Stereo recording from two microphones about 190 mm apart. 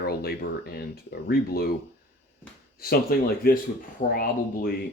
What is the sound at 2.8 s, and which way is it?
Speech, 50° left (ahead or behind).